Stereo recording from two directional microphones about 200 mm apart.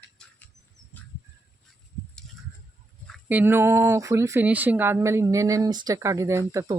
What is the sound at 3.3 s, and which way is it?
Speech, 10° right (ahead or behind).